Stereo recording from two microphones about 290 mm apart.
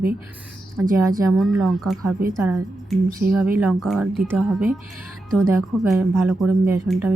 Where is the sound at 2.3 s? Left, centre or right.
Centre.